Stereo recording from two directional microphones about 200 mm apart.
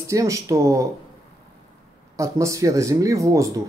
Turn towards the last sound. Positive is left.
turn(degrees=-15)  # may be behind; listen again after turning